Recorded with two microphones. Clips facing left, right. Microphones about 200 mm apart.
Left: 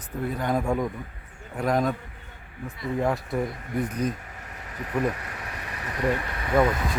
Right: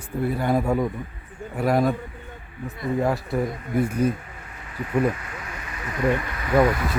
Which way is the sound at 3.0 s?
Centre (ahead or behind).